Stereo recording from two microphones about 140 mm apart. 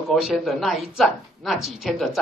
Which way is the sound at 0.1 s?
Centre (ahead or behind).